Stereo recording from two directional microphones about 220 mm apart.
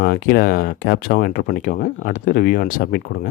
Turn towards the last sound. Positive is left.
turn(degrees=40)  # may be behind; listen again after turning